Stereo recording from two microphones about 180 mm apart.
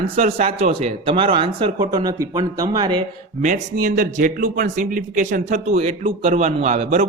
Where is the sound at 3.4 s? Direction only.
45° right (ahead or behind).